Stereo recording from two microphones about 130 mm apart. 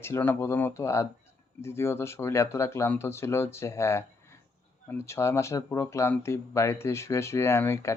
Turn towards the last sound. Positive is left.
turn(degrees=20)  # may be behind; listen again after turning